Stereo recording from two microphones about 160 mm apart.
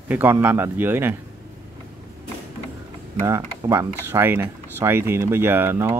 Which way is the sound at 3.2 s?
15° right (ahead or behind).